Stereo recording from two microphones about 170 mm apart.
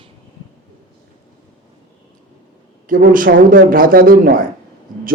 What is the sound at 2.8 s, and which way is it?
A man's voice, 55° right (ahead or behind).